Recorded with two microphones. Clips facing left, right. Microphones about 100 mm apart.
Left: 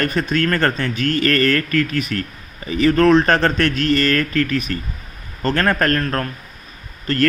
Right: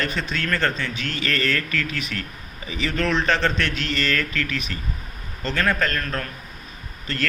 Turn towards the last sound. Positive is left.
turn(degrees=45)  # may be behind; listen again after turning